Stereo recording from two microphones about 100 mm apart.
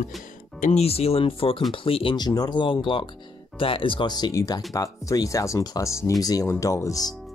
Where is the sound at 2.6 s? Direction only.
55° left (ahead or behind).